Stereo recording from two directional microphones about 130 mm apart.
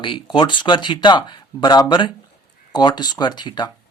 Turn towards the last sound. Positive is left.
turn(degrees=35)  # may be behind; listen again after turning